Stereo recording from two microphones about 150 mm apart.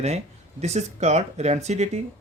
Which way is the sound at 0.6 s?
50° right (ahead or behind).